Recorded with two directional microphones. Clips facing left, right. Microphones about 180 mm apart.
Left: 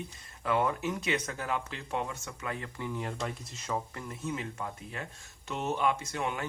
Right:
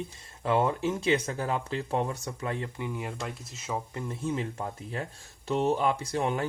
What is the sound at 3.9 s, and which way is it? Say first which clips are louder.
Speech: right 5 dB; 25° right (ahead or behind).